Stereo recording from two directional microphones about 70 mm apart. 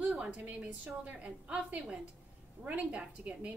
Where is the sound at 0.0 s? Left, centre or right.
Centre.